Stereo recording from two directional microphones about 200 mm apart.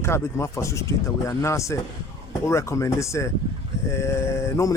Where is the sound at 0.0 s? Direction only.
15° left (ahead or behind).